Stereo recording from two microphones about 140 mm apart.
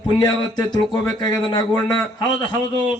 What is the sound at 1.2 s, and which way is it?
Speech, 30° left (ahead or behind).